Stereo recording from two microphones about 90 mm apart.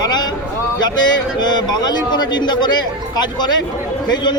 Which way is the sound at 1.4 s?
55° left (ahead or behind).